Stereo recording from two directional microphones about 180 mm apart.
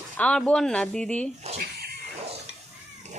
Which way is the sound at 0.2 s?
5° left (ahead or behind).